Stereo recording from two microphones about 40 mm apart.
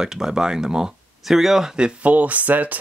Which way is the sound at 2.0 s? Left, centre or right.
Right.